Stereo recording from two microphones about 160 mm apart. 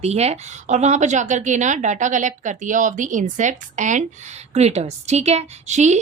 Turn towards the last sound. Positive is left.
turn(degrees=-45)  # may be behind; listen again after turning